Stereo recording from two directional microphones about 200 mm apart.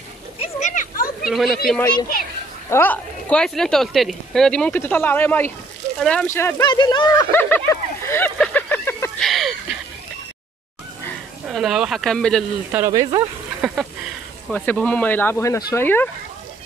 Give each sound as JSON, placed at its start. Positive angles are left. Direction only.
{"t": 0.4, "sound": "a sound", "side_deg": 35}
{"t": 1.3, "sound": "speech", "side_deg": 0}
{"t": 1.8, "sound": "speech", "side_deg": 20}
{"t": 2.7, "sound": "speech", "side_deg": 10}
{"t": 6.7, "sound": "speech", "side_deg": 25}
{"t": 7.4, "sound": "a sound", "side_deg": 10}
{"t": 9.3, "sound": "a sound", "side_deg": 0}
{"t": 11.4, "sound": "speech", "side_deg": 0}
{"t": 12.7, "sound": "speech", "side_deg": -15}
{"t": 14.5, "sound": "speech", "side_deg": 5}